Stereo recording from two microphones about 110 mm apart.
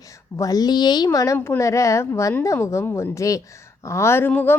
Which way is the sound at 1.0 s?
30° left (ahead or behind).